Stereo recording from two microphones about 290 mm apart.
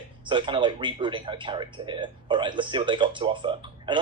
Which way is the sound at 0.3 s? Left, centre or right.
Centre.